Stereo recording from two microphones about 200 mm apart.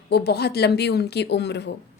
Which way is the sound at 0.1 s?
55° left (ahead or behind).